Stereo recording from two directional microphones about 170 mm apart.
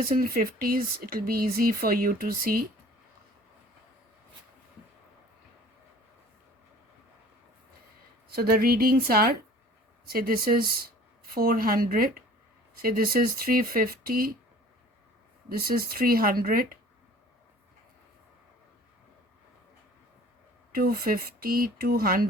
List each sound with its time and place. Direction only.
0.0 s speech: 60° right (ahead or behind)
8.3 s speech: 60° right (ahead or behind)
15.4 s speech: 60° right (ahead or behind)
20.7 s speech: 60° right (ahead or behind)